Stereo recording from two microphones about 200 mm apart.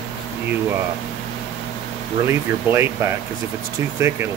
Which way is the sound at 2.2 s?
10° right (ahead or behind).